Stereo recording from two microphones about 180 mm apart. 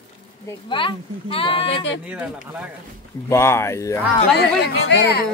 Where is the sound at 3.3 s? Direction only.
15° left (ahead or behind).